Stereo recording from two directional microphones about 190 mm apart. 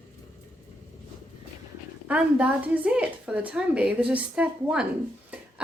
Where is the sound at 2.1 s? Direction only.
5° right (ahead or behind).